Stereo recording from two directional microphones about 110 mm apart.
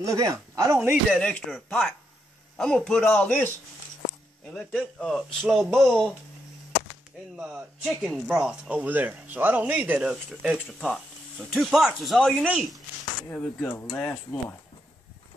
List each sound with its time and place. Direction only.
0.0 s speech: 30° right (ahead or behind)
1.1 s a man's voice: 10° left (ahead or behind)
4.6 s a man's voice: 5° left (ahead or behind)
7.3 s a man's voice: 5° right (ahead or behind)
13.3 s a man's voice: 15° left (ahead or behind)